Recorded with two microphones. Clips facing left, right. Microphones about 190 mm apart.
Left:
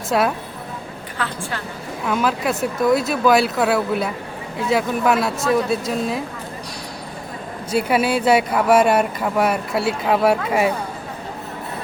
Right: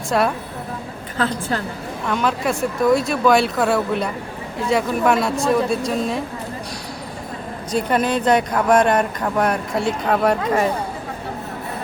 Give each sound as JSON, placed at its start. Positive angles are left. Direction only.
{"t": 0.1, "sound": "speech", "side_deg": 0}
{"t": 1.2, "sound": "a woman's voice", "side_deg": -40}
{"t": 2.0, "sound": "speech", "side_deg": 5}
{"t": 7.7, "sound": "speech", "side_deg": 5}